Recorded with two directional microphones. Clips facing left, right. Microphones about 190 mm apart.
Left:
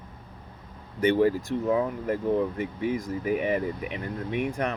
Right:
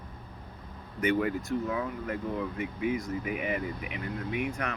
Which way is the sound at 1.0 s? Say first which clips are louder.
Left 6 dB; 30° left (ahead or behind).